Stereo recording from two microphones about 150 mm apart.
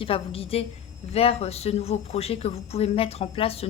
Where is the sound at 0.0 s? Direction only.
40° left (ahead or behind).